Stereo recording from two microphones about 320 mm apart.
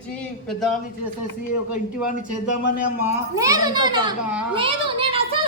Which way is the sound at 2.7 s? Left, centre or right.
Centre.